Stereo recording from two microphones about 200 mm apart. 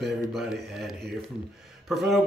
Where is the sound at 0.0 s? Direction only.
Centre (ahead or behind).